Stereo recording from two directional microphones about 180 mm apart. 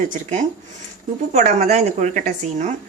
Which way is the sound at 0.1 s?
45° right (ahead or behind).